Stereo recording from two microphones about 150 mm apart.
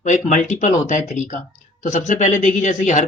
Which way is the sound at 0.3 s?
55° left (ahead or behind).